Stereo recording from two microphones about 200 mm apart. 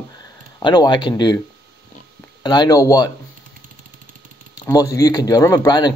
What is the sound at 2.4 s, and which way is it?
Speech, 20° left (ahead or behind).